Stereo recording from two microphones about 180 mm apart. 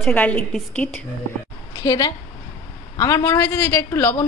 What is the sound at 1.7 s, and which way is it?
A woman's voice, 20° left (ahead or behind).